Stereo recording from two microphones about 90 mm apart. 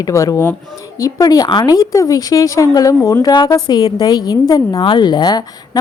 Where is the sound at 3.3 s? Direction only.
55° left (ahead or behind).